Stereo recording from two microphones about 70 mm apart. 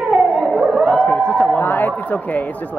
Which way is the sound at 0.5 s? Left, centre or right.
Centre.